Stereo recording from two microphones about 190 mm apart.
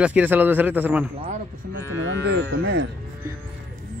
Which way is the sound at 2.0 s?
65° right (ahead or behind).